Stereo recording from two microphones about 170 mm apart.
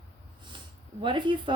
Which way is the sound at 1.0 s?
30° right (ahead or behind).